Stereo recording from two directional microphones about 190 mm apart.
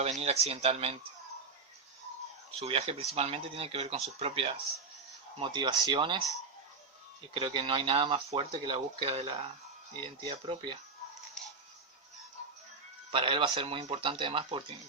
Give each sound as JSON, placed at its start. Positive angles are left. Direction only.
{"t": 0.0, "sound": "speech", "side_deg": -35}
{"t": 2.5, "sound": "speech", "side_deg": -30}
{"t": 13.1, "sound": "speech", "side_deg": -25}